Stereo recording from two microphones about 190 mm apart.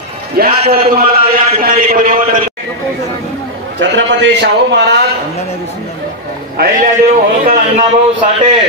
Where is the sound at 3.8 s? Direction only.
75° right (ahead or behind).